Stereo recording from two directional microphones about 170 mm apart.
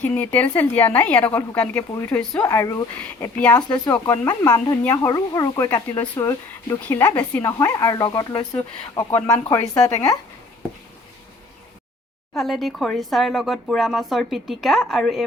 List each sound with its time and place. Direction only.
0.0 s speech: 10° left (ahead or behind)
12.4 s speech: centre (ahead or behind)